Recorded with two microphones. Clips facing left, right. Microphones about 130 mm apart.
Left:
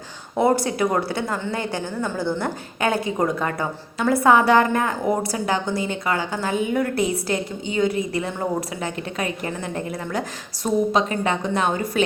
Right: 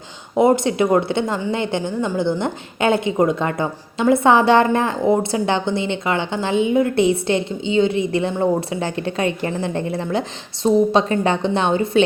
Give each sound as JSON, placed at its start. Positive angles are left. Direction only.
{"t": 0.3, "sound": "a woman's voice", "side_deg": -20}